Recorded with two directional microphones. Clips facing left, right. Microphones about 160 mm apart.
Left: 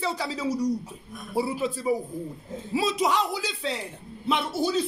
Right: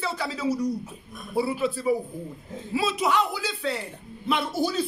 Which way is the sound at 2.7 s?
35° left (ahead or behind).